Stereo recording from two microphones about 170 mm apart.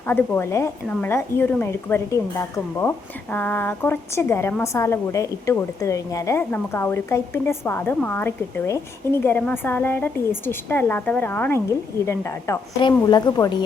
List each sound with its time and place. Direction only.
0.1 s a woman's voice: 10° left (ahead or behind)